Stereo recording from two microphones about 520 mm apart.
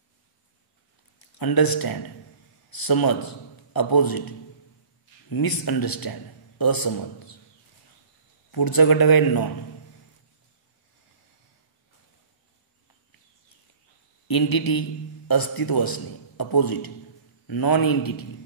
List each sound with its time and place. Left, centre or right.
1.4 s speech: left
5.3 s speech: left
8.5 s a man's voice: left
14.2 s a man's voice: left